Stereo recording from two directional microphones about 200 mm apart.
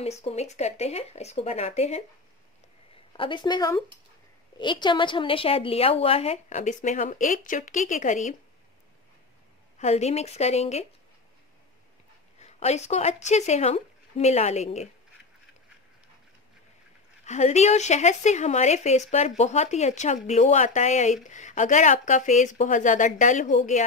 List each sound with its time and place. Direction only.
0.0 s a woman's voice: 30° left (ahead or behind)
3.1 s a woman's voice: 25° left (ahead or behind)
9.8 s a woman's voice: 35° left (ahead or behind)
12.4 s speech: 35° left (ahead or behind)
17.2 s a woman's voice: 35° left (ahead or behind)